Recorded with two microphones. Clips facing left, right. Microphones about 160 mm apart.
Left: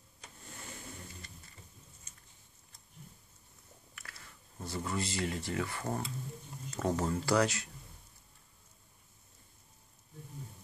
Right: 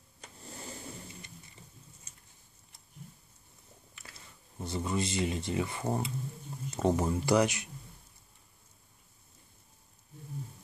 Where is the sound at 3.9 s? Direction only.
20° right (ahead or behind).